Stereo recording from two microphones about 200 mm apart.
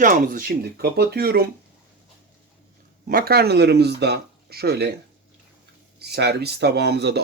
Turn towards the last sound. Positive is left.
turn(degrees=-55)  # may be behind; listen again after turning